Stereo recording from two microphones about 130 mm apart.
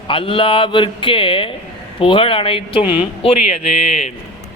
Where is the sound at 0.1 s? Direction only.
45° left (ahead or behind).